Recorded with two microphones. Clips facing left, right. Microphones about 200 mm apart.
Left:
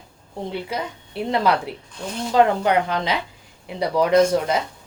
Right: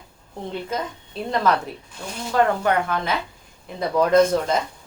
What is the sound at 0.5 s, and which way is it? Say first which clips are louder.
A woman's voice: right 2 dB; 10° left (ahead or behind).